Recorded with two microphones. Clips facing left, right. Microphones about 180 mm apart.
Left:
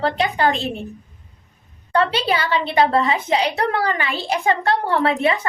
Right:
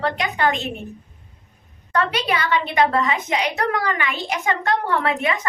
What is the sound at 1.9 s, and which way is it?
A woman's voice, 30° left (ahead or behind).